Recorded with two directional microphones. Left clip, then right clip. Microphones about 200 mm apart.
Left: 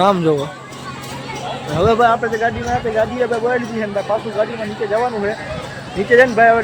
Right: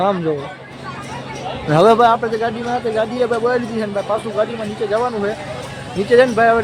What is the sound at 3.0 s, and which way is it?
Speech, 10° right (ahead or behind).